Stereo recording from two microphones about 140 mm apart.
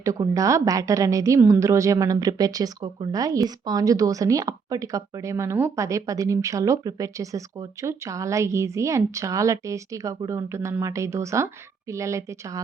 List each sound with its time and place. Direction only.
0.0 s a woman's voice: 25° right (ahead or behind)